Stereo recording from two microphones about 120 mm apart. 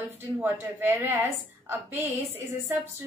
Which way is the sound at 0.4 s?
20° right (ahead or behind).